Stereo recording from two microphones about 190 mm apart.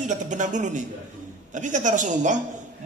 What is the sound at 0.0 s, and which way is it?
A man's voice, 40° right (ahead or behind).